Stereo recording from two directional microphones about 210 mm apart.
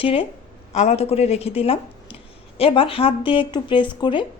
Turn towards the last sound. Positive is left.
turn(degrees=20)  # may be behind; listen again after turning